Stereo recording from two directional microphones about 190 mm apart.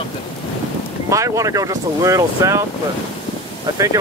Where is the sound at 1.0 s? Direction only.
15° right (ahead or behind).